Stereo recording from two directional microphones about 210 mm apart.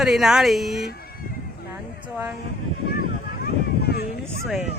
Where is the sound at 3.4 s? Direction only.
50° left (ahead or behind).